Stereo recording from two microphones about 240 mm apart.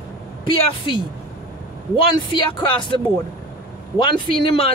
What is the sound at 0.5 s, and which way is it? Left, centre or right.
Speech, left.